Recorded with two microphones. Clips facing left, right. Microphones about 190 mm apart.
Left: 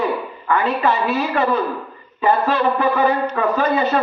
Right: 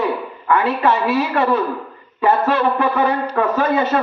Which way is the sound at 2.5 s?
60° right (ahead or behind).